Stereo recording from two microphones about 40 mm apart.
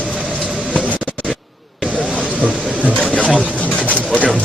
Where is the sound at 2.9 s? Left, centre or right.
Left.